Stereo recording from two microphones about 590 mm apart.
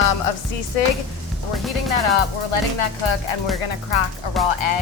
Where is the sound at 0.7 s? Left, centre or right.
Left.